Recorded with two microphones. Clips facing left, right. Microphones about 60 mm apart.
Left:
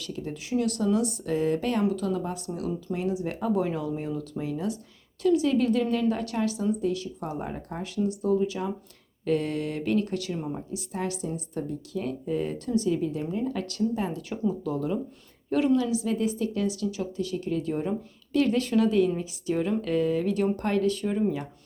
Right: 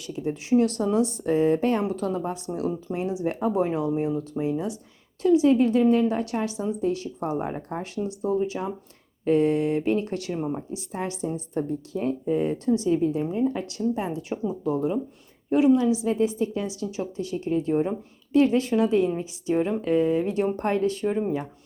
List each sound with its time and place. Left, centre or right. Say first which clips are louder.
0.0 s speech: right 5 dB; centre
0.5 s speech: right 4 dB; right